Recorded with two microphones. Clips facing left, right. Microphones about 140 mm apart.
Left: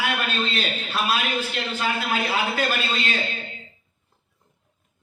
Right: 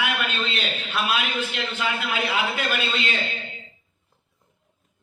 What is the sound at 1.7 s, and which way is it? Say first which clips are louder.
A man's voice: left 2 dB; 40° left (ahead or behind).